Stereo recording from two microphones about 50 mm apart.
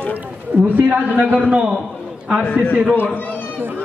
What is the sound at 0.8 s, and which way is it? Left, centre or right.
Speech, right.